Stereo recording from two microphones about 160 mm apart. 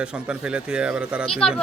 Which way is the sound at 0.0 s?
5° right (ahead or behind).